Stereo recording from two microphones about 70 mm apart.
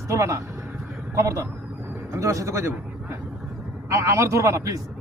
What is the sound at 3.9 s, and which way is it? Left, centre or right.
Speech, right.